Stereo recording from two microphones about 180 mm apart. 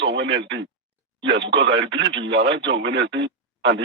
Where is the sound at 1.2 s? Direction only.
85° right.